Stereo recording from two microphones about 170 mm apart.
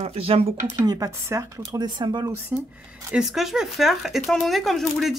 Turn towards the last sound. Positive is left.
turn(degrees=0)  # may be behind; listen again after turning